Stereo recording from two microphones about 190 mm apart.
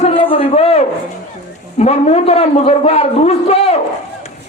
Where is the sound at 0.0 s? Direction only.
30° left (ahead or behind).